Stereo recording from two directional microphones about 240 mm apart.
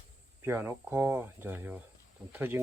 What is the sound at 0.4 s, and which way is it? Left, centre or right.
Speech, centre.